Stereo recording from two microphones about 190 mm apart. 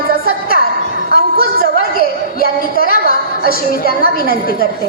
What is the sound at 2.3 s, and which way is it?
A woman's voice, 50° left (ahead or behind).